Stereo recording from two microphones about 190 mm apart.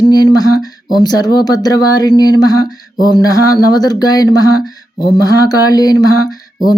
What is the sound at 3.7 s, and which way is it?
Speech, 20° left (ahead or behind).